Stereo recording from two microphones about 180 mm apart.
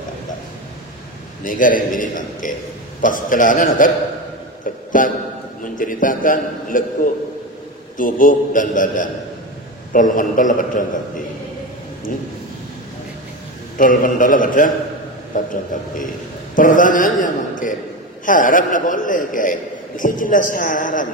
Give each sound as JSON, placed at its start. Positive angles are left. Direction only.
{"t": 1.4, "sound": "a man's voice", "side_deg": 50}
{"t": 5.0, "sound": "a man's voice", "side_deg": 50}
{"t": 8.0, "sound": "a man's voice", "side_deg": 50}
{"t": 13.7, "sound": "a man's voice", "side_deg": 50}